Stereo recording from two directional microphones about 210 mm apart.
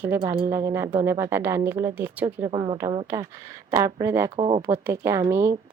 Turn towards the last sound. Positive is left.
turn(degrees=-15)  # may be behind; listen again after turning